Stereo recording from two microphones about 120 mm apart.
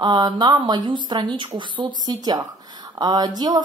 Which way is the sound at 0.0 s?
35° right (ahead or behind).